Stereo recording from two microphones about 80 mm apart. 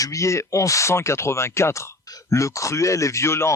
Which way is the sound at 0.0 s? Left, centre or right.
Left.